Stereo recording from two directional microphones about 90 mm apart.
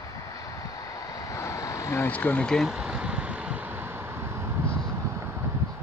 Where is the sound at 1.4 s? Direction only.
35° left (ahead or behind).